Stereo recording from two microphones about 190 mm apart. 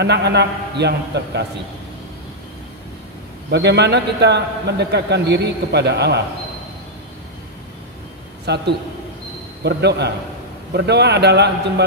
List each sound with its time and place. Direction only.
0.0 s a man's voice: 60° right (ahead or behind)
3.4 s a man's voice: 60° right (ahead or behind)
8.5 s a man's voice: 60° right (ahead or behind)